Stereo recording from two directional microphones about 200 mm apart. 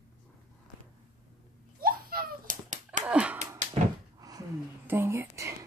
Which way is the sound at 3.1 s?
5° right (ahead or behind).